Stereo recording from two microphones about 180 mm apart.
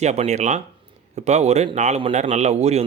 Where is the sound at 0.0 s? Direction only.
40° right (ahead or behind).